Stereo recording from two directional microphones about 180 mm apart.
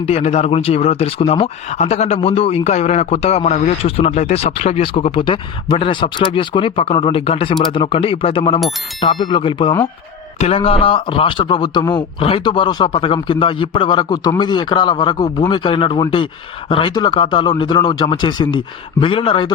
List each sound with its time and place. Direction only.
0.0 s a man's voice: 35° left (ahead or behind)